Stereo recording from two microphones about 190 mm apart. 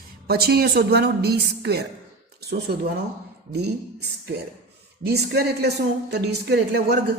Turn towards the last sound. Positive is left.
turn(degrees=-60)  # may be behind; listen again after turning